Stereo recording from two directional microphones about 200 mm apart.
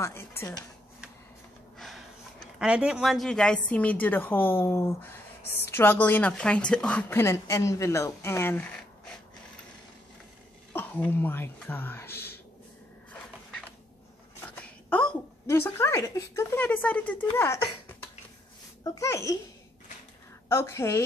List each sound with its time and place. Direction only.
0.0 s a woman's voice: 15° left (ahead or behind)
1.8 s a woman's voice: centre (ahead or behind)
10.7 s speech: 10° left (ahead or behind)
13.1 s a sound: 5° left (ahead or behind)
14.5 s a woman's voice: 5° left (ahead or behind)
20.4 s a woman's voice: 15° left (ahead or behind)